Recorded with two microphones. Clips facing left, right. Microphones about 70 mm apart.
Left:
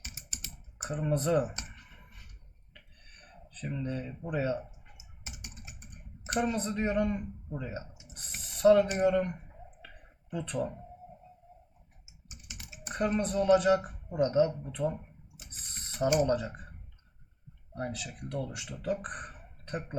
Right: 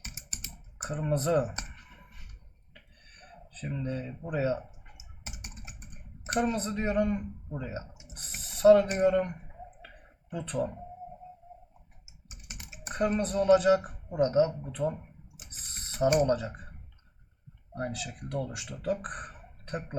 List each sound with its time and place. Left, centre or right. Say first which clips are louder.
0.8 s a sound: right 1 dB; centre
1.1 s speech: right 1 dB; centre
2.7 s a sound: right 1 dB; centre
3.8 s speech: right 1 dB; centre
5.2 s computer keyboard: right 2 dB; right
6.4 s speech: right 1 dB; centre
8.1 s a sound: right 1 dB; centre
9.0 s speech: right 2 dB; centre
10.4 s speech: right 3 dB; centre
12.9 s speech: right 1 dB; centre
14.8 s a sound: right 1 dB; centre
16.1 s speech: right 2 dB; centre
17.8 s speech: right 2 dB; centre